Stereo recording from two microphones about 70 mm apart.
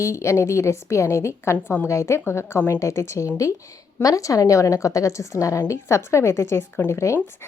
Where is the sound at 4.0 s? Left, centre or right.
Left.